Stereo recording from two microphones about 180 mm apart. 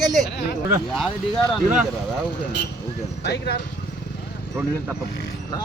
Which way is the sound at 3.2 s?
70° left (ahead or behind).